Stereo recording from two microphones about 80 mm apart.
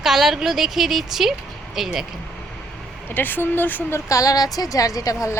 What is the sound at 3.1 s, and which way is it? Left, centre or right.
Speech, left.